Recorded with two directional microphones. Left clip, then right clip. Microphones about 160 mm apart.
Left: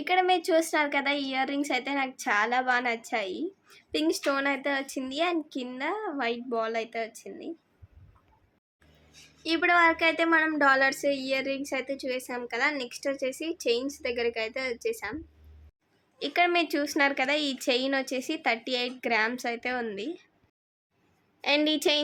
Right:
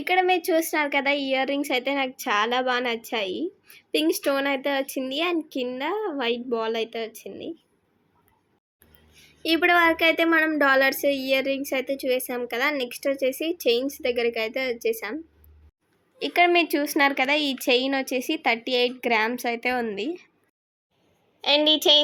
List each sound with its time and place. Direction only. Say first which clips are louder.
0.0 s a woman's voice: right 3 dB; 25° right (ahead or behind)
9.4 s a woman's voice: right 3 dB; 25° right (ahead or behind)
21.4 s a woman's voice: right 6 dB; 10° left (ahead or behind)